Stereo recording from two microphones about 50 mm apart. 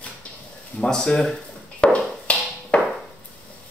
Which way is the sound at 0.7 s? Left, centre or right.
Centre.